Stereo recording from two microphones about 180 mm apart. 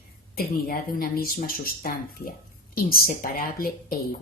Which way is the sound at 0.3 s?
55° left (ahead or behind).